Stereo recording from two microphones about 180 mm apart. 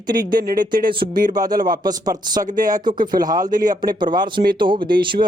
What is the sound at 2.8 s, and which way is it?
Speech, 25° right (ahead or behind).